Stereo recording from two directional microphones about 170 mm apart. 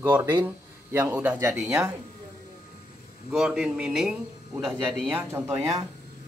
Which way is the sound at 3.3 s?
5° right (ahead or behind).